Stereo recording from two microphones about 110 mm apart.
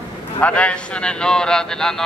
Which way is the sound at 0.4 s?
10° left (ahead or behind).